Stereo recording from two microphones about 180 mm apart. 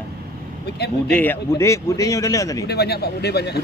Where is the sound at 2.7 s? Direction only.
65° left (ahead or behind).